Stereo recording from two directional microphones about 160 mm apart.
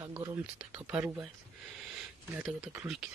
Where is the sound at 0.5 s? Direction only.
10° right (ahead or behind).